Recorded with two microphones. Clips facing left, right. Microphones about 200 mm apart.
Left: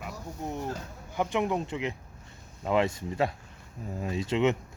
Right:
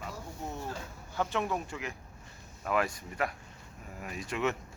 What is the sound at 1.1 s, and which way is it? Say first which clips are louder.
Speech: left 4 dB; 15° left (ahead or behind).